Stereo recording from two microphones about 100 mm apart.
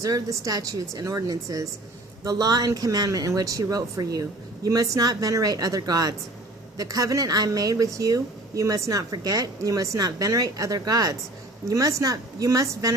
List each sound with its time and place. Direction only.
0.0 s a woman's voice: 35° right (ahead or behind)